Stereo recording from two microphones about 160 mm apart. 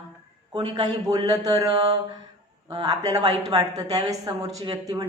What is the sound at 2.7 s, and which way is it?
Speech, 25° right (ahead or behind).